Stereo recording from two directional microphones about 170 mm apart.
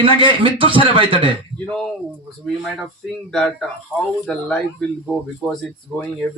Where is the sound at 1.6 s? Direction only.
5° left (ahead or behind).